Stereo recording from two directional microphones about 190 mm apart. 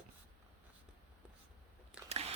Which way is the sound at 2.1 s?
35° right (ahead or behind).